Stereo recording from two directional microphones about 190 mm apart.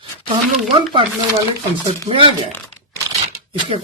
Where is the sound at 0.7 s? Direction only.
25° right (ahead or behind).